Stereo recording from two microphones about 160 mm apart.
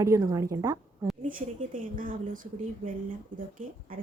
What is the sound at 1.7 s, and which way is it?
Speech, 60° right (ahead or behind).